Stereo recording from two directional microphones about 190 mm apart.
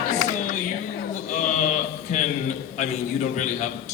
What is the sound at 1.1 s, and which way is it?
Sheep, 40° left (ahead or behind).